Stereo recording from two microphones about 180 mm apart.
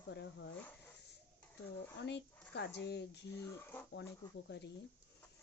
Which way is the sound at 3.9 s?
75° left (ahead or behind).